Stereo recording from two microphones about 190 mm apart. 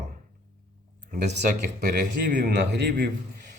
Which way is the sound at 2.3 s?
60° right (ahead or behind).